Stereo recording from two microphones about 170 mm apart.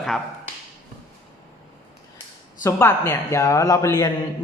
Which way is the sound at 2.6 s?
15° left (ahead or behind).